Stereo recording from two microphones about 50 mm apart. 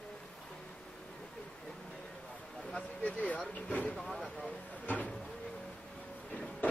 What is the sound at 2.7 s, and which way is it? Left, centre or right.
Speech, left.